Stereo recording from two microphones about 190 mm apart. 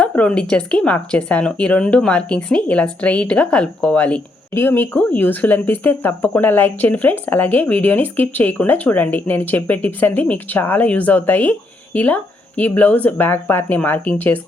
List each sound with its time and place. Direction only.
0.0 s speech: 5° left (ahead or behind)